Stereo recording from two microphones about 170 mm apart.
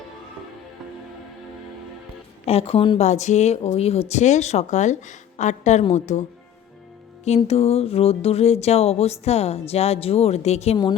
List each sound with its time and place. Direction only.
2.5 s speech: 35° left (ahead or behind)
3.0 s speech: 45° left (ahead or behind)
7.3 s speech: 35° left (ahead or behind)